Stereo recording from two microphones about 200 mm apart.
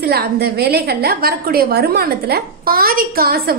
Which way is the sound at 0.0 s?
50° right (ahead or behind).